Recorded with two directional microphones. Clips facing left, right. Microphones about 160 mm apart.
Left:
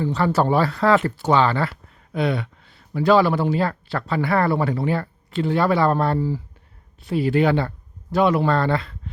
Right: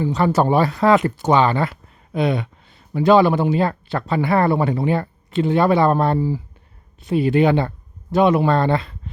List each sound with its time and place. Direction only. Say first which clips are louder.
0.0 s speech: right 2 dB; 15° right (ahead or behind)